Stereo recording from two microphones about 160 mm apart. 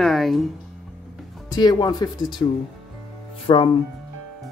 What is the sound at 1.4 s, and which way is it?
Speech, 25° left (ahead or behind).